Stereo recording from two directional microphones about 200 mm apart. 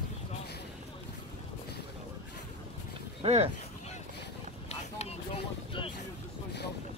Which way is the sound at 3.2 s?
30° right (ahead or behind).